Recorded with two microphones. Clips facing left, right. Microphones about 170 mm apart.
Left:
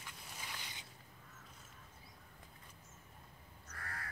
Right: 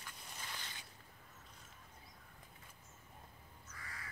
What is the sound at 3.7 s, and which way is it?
Crow, 60° left (ahead or behind).